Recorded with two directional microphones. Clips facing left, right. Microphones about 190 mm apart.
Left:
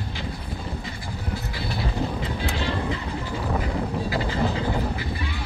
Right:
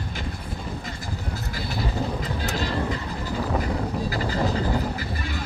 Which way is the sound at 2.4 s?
40° right (ahead or behind).